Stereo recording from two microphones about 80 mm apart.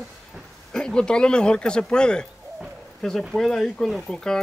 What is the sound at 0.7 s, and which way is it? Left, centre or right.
Speech, centre.